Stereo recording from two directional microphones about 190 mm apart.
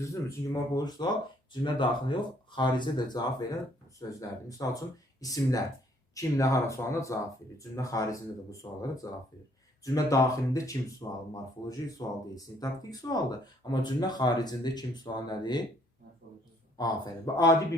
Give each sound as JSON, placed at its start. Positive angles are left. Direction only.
{"t": 0.0, "sound": "speech", "side_deg": 15}
{"t": 16.7, "sound": "speech", "side_deg": 20}